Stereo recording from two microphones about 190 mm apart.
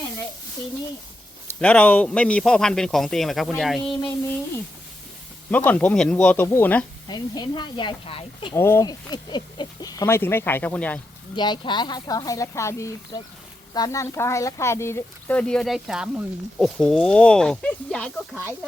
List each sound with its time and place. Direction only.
1.5 s speech: 5° left (ahead or behind)
5.5 s speech: 10° left (ahead or behind)
7.1 s speech: 25° left (ahead or behind)
8.5 s speech: 15° left (ahead or behind)
11.3 s speech: 25° left (ahead or behind); by 18.1 s 5° left (ahead or behind)